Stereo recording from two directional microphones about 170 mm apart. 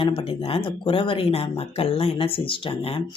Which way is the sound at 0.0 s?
30° left (ahead or behind).